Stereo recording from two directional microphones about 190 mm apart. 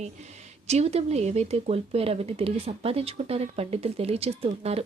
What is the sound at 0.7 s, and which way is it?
Speech, 35° right (ahead or behind).